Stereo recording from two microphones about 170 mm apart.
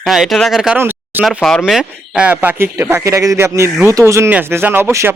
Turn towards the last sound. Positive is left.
turn(degrees=-15)  # may be behind; listen again after turning